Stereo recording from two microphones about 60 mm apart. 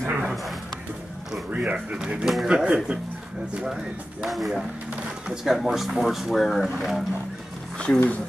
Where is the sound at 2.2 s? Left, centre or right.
Centre.